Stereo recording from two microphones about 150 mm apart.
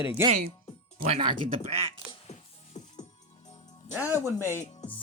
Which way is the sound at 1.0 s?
35° right (ahead or behind).